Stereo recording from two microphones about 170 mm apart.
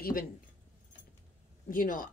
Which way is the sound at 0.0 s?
60° left (ahead or behind).